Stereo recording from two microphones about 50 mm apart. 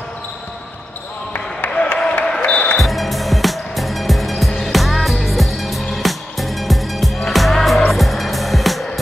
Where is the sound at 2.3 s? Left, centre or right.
Left.